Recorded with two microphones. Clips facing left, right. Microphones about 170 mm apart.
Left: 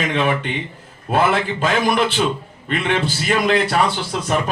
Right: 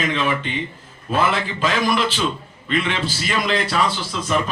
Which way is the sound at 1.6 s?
55° left (ahead or behind).